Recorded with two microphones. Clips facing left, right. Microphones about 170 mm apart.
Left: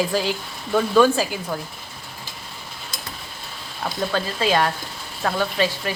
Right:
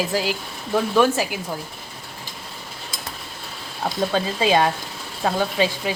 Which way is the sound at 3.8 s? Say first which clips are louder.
Right 2 dB; 20° right (ahead or behind).